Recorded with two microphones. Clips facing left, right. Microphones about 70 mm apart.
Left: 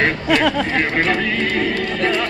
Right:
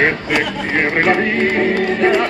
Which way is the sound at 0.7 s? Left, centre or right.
Right.